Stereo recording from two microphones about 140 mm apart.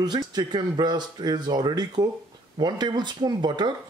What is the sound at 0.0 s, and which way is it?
Speech, 30° right (ahead or behind).